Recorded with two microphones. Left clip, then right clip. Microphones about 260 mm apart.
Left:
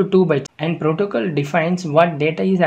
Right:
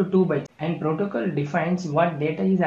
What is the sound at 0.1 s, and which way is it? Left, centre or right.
Speech, left.